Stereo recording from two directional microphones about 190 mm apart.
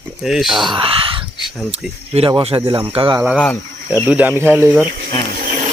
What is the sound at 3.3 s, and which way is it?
Speech, 10° left (ahead or behind).